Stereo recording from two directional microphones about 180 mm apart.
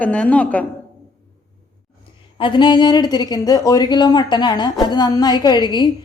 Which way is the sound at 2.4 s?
25° left (ahead or behind).